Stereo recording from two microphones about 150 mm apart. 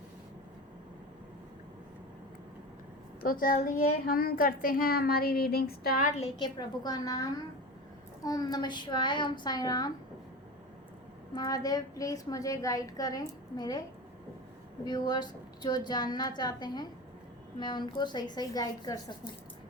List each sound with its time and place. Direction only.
3.2 s a child's voice: 70° left (ahead or behind)
6.4 s a woman's voice: 25° left (ahead or behind)
11.3 s a woman's voice: 25° left (ahead or behind)
14.8 s a woman's voice: 30° left (ahead or behind)